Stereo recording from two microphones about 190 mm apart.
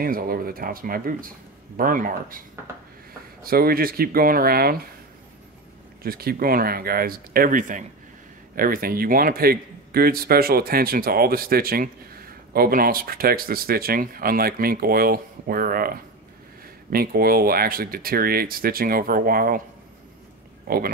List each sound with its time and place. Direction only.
0.0 s a man's voice: 50° right (ahead or behind)
3.4 s a man's voice: 50° right (ahead or behind)
6.0 s a man's voice: 50° right (ahead or behind)
16.9 s a man's voice: 50° right (ahead or behind)
20.6 s a sound: 50° right (ahead or behind)